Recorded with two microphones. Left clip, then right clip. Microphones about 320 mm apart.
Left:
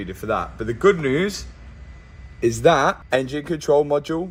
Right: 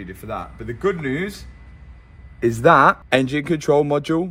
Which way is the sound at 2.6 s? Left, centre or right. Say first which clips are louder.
Right 4 dB; right.